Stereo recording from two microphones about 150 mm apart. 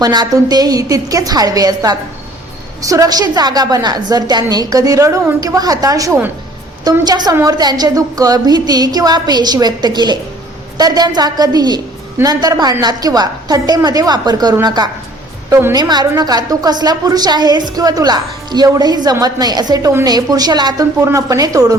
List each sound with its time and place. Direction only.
0.0 s a woman's voice: 25° right (ahead or behind)